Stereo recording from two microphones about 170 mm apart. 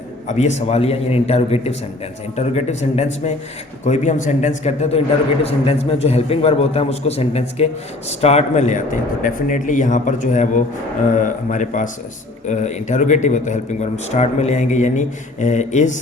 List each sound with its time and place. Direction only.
0.3 s a man's voice: 45° left (ahead or behind)